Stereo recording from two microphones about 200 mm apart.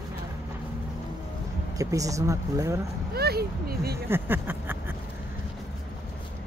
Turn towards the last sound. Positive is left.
turn(degrees=-10)  # may be behind; listen again after turning